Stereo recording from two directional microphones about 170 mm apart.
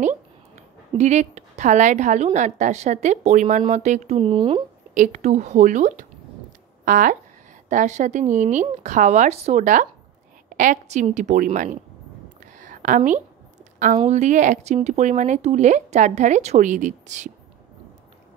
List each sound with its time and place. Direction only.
0.9 s a woman's voice: 40° right (ahead or behind)
4.9 s a woman's voice: 50° right (ahead or behind)
12.5 s a sound: 50° right (ahead or behind)
13.9 s a woman's voice: 40° right (ahead or behind)